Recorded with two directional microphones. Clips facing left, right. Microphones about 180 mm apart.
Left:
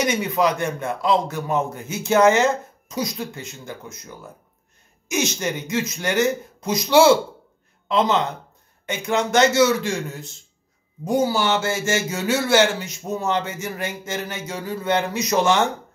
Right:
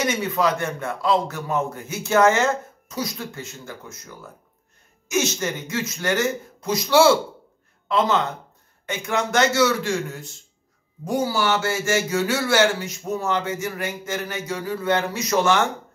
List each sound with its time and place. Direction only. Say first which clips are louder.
0.0 s a man's voice: left 2 dB; 15° left (ahead or behind)
5.0 s a man's voice: even; 15° left (ahead or behind)
8.8 s speech: left 2 dB; 20° left (ahead or behind)
11.1 s speech: left 2 dB; 20° left (ahead or behind)